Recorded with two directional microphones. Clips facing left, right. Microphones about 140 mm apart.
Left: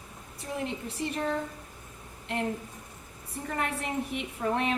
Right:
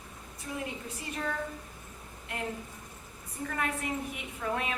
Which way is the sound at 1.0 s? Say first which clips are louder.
Left 6 dB; 30° left (ahead or behind).